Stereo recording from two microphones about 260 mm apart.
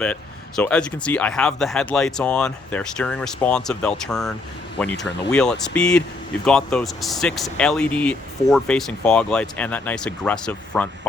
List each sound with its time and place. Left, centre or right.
0.0 s speech: centre